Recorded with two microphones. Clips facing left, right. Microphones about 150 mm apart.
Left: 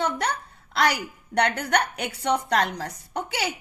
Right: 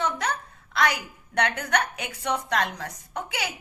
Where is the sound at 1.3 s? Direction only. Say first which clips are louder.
Left 2 dB; 30° left (ahead or behind).